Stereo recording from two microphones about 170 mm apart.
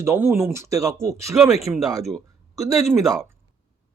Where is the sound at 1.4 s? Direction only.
Centre (ahead or behind).